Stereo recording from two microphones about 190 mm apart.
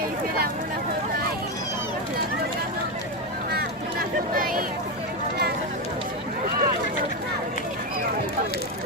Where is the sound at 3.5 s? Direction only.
50° right (ahead or behind).